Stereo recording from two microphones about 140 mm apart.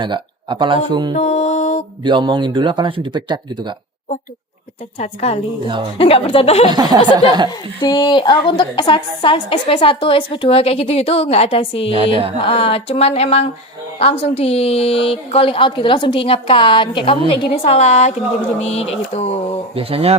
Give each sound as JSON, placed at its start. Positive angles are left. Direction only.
{"t": 0.0, "sound": "speech", "side_deg": -35}
{"t": 1.1, "sound": "music", "side_deg": 55}
{"t": 2.0, "sound": "speech", "side_deg": -35}
{"t": 4.9, "sound": "a woman's voice", "side_deg": 50}
{"t": 7.1, "sound": "speech", "side_deg": -30}
{"t": 7.8, "sound": "a woman's voice", "side_deg": 30}
{"t": 19.7, "sound": "speech", "side_deg": -45}